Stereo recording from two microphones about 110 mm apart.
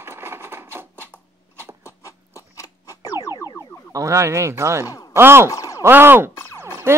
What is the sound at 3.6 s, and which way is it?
Speech, 30° right (ahead or behind).